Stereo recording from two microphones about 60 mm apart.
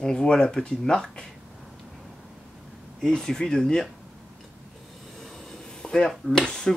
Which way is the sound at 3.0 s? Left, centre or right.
Centre.